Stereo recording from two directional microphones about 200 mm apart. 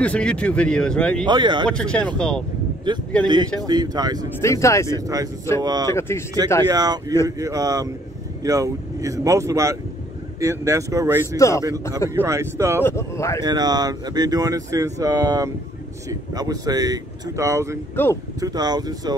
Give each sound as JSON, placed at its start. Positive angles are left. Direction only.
{"t": 0.0, "sound": "speech", "side_deg": 5}
{"t": 1.2, "sound": "speech", "side_deg": -20}
{"t": 1.7, "sound": "speech", "side_deg": 5}
{"t": 2.9, "sound": "speech", "side_deg": -20}
{"t": 4.4, "sound": "speech", "side_deg": 15}
{"t": 4.9, "sound": "speech", "side_deg": -20}
{"t": 5.9, "sound": "speech", "side_deg": 15}
{"t": 6.7, "sound": "speech", "side_deg": -20}
{"t": 11.3, "sound": "speech", "side_deg": 15}
{"t": 12.1, "sound": "speech", "side_deg": -15}
{"t": 12.8, "sound": "speech", "side_deg": 15}
{"t": 13.4, "sound": "speech", "side_deg": -20}
{"t": 18.0, "sound": "speech", "side_deg": 10}
{"t": 18.4, "sound": "speech", "side_deg": -20}